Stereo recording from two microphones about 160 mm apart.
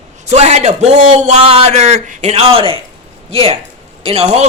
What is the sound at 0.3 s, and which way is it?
A man's voice, 45° right (ahead or behind).